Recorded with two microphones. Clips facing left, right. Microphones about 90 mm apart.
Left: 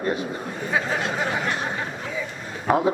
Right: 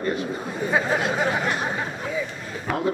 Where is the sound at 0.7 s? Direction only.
10° right (ahead or behind).